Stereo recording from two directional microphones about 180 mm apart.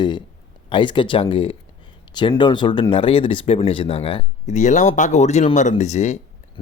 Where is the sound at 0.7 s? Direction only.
25° left (ahead or behind).